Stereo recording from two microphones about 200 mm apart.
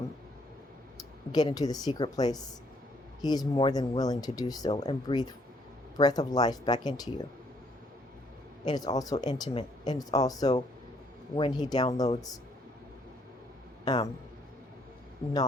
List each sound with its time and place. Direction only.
1.3 s speech: 20° left (ahead or behind)
8.6 s speech: 20° left (ahead or behind)
13.8 s speech: 20° left (ahead or behind)